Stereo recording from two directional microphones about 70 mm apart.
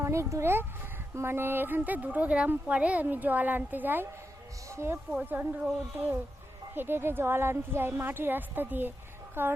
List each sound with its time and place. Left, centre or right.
0.0 s speech: right
4.7 s speech: right
5.2 s a woman's voice: right